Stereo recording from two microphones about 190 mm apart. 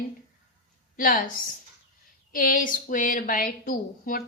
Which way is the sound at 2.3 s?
45° left (ahead or behind).